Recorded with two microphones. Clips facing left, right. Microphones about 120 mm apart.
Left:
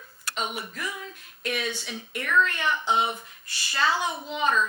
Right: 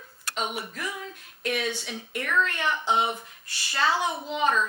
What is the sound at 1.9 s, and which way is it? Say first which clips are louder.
Speech: left 3 dB; 45° right (ahead or behind).